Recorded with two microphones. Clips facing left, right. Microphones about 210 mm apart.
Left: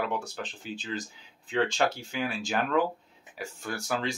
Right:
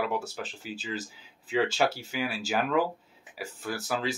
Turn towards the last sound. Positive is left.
turn(degrees=-5)  # may be behind; listen again after turning